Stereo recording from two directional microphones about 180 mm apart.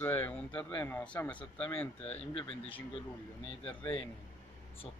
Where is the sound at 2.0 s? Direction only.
35° left (ahead or behind).